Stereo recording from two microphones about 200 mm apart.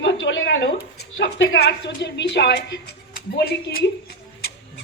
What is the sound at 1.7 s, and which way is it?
A woman's voice, 60° left (ahead or behind).